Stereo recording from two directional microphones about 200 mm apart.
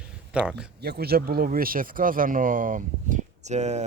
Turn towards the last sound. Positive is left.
turn(degrees=-35)  # may be behind; listen again after turning